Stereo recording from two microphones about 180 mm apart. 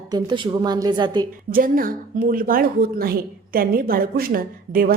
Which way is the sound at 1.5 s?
50° right (ahead or behind).